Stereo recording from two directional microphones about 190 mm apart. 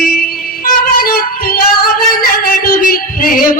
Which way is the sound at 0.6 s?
50° left (ahead or behind).